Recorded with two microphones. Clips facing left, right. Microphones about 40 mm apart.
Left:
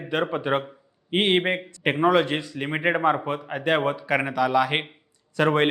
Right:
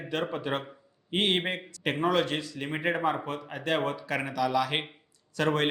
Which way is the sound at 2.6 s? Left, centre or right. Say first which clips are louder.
Left 6 dB; left.